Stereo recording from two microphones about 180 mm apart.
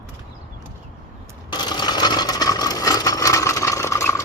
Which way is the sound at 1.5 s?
25° left (ahead or behind).